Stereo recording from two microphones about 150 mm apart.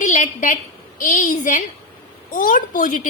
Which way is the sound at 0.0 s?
55° left (ahead or behind).